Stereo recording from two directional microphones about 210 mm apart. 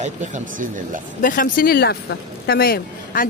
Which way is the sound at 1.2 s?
40° left (ahead or behind).